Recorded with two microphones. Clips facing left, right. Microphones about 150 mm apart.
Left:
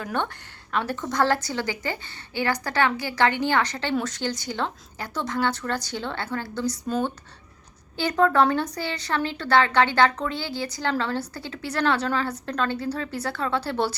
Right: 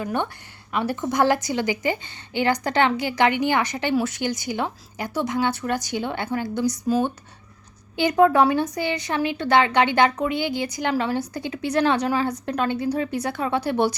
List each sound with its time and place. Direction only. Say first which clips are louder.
0.0 s a woman's voice: right 2 dB; 10° right (ahead or behind)